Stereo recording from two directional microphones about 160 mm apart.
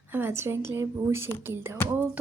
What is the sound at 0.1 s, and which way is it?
A woman's voice, 15° right (ahead or behind).